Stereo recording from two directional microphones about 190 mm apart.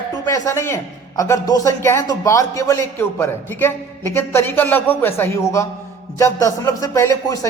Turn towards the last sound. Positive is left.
turn(degrees=15)  # may be behind; listen again after turning